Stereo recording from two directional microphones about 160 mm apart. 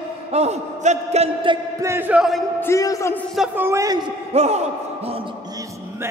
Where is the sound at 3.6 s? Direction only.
20° right (ahead or behind).